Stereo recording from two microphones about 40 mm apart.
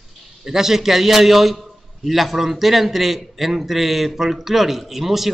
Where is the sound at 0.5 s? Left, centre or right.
Centre.